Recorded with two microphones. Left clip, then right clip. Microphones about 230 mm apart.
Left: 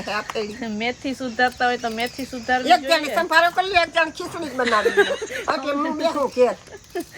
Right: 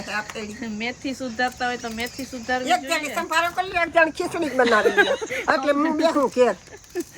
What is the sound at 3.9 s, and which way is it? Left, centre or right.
Speech, right.